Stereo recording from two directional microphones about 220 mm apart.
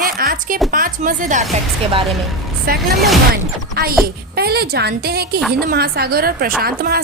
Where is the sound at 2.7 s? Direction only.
40° right (ahead or behind).